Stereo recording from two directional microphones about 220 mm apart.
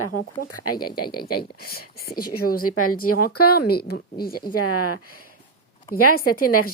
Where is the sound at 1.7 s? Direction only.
45° left (ahead or behind).